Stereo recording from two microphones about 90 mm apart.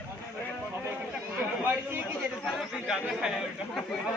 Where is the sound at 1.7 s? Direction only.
30° right (ahead or behind).